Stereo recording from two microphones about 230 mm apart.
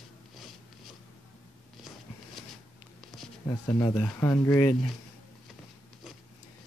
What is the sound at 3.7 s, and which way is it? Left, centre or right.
Speech, centre.